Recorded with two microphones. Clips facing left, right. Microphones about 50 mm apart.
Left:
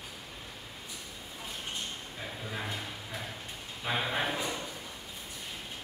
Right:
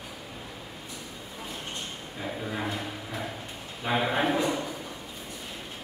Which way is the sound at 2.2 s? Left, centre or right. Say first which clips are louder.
Right 7 dB; centre.